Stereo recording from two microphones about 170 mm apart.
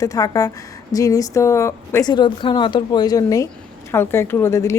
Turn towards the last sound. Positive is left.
turn(degrees=15)  # may be behind; listen again after turning